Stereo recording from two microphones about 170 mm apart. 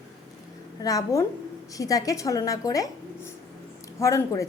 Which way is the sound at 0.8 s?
20° left (ahead or behind).